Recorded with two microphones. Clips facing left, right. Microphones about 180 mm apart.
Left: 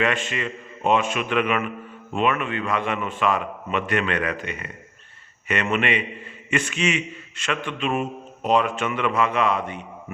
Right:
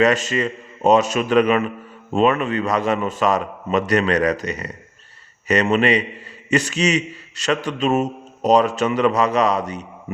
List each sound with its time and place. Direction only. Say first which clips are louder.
0.0 s a man's voice: right 7 dB; 40° right (ahead or behind)